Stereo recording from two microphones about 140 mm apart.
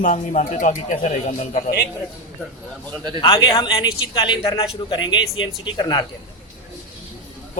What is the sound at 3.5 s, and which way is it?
A man's voice, 30° left (ahead or behind).